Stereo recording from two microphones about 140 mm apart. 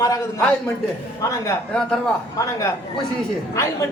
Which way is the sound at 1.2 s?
20° left (ahead or behind).